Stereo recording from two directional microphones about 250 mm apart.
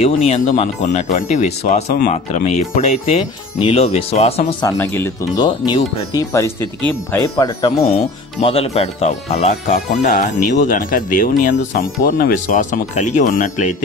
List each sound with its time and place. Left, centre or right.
0.0 s speech: left
4.6 s speech: centre; by 13.7 s left